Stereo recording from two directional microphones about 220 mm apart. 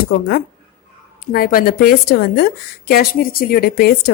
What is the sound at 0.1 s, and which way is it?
A woman's voice, 45° left (ahead or behind).